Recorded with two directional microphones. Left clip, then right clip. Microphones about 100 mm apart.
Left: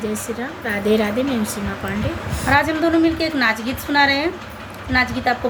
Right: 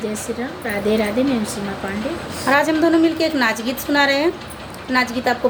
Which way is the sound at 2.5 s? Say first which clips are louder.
Right 1 dB; 45° right (ahead or behind).